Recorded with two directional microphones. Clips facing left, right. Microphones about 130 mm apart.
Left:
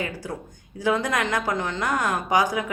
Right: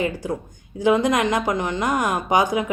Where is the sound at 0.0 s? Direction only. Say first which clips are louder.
Right 6 dB; 20° right (ahead or behind).